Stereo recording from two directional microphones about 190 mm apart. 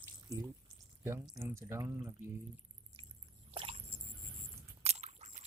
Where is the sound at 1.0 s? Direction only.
15° right (ahead or behind).